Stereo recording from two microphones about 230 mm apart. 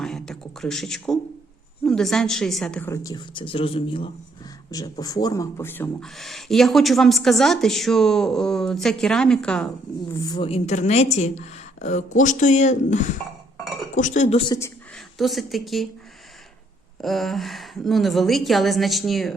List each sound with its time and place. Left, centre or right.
0.0 s a sound: centre
1.8 s a woman's voice: centre
10.1 s a woman's voice: centre
14.9 s a woman's voice: centre
17.0 s speech: centre